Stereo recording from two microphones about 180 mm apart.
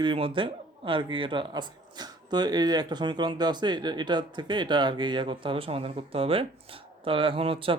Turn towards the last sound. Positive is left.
turn(degrees=-30)  # may be behind; listen again after turning